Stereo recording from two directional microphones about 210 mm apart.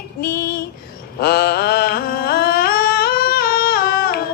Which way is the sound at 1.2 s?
50° left (ahead or behind).